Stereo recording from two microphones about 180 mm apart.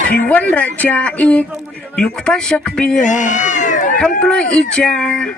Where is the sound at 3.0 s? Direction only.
45° left (ahead or behind).